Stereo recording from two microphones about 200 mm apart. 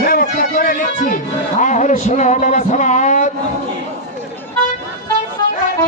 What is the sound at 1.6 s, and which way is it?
A man's voice, 35° left (ahead or behind).